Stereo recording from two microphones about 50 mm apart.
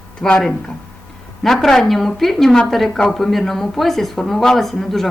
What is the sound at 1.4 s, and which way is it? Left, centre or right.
Speech, centre.